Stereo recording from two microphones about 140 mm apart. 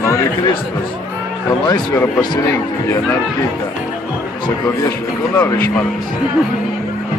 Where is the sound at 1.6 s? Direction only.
30° left (ahead or behind).